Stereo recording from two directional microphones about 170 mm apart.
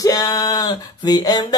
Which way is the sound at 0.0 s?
20° left (ahead or behind).